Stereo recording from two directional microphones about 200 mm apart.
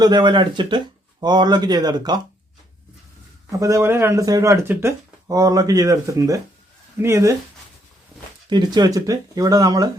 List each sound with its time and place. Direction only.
0.0 s speech: 20° right (ahead or behind)
3.5 s speech: 15° right (ahead or behind)
8.4 s speech: 20° right (ahead or behind)